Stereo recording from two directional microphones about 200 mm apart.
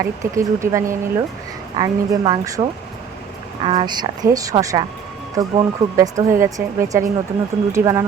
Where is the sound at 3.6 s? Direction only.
20° right (ahead or behind).